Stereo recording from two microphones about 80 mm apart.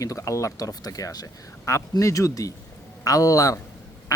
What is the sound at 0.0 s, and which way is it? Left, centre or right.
Speech, left.